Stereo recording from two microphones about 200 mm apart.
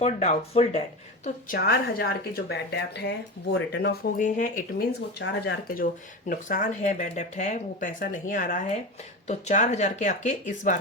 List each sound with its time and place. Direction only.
0.0 s speech: 30° left (ahead or behind)
1.2 s a woman's voice: 45° left (ahead or behind)
4.2 s speech: 40° left (ahead or behind)
5.2 s speech: 60° left (ahead or behind)
5.6 s speech: 45° left (ahead or behind)